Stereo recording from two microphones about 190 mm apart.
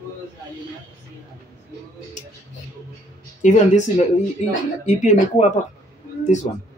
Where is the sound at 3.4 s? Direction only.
40° left (ahead or behind).